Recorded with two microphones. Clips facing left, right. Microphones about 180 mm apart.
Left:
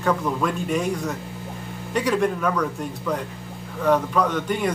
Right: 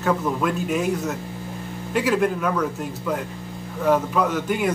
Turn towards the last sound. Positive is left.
turn(degrees=-5)  # may be behind; listen again after turning